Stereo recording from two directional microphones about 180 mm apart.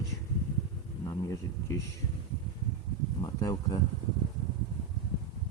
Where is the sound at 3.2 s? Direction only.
25° left (ahead or behind).